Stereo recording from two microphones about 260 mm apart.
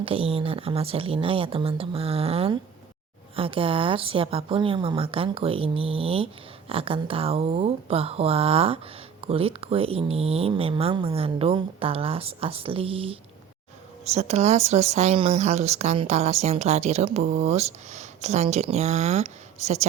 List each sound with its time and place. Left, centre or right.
0.0 s speech: right